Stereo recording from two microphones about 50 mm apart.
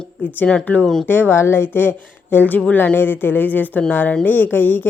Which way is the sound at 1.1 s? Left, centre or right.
Left.